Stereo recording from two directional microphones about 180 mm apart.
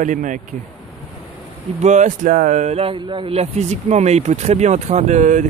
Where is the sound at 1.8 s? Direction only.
40° right (ahead or behind).